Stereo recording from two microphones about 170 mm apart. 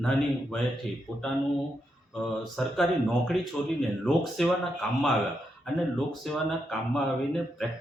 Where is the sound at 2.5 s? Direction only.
Centre (ahead or behind).